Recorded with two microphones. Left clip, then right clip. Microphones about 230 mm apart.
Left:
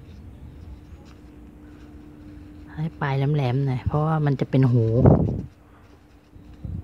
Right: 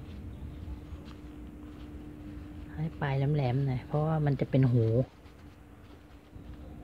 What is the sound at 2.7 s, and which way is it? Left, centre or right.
Speech, centre.